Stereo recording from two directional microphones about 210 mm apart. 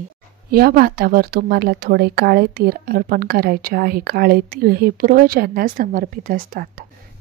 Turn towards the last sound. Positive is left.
turn(degrees=-40)  # may be behind; listen again after turning